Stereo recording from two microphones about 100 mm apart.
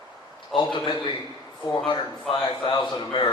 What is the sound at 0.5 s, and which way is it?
Speech, 50° left (ahead or behind).